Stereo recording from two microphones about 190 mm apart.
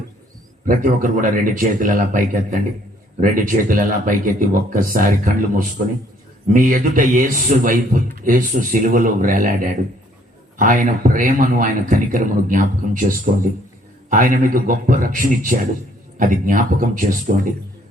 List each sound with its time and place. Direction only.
0.6 s a man's voice: 45° right (ahead or behind)